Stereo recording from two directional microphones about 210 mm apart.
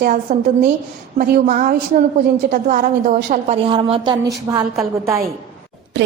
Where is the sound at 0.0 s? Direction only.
40° right (ahead or behind); by 4.6 s 15° right (ahead or behind).